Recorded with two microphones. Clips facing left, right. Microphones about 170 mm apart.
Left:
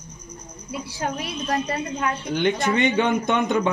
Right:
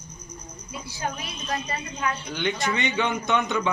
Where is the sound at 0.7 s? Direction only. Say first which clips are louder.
Left 4 dB; 75° left (ahead or behind).